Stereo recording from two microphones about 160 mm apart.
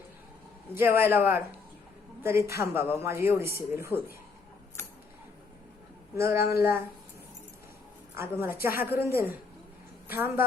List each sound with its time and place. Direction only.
0.7 s speech: 15° right (ahead or behind)
6.1 s speech: 15° right (ahead or behind)
8.1 s a woman's voice: 15° right (ahead or behind)